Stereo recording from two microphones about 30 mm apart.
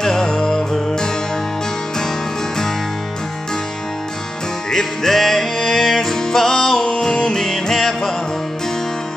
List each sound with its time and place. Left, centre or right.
0.0 s music: centre
4.6 s music: centre
6.8 s music: left